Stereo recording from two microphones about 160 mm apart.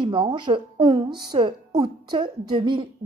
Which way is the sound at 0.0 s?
30° right (ahead or behind).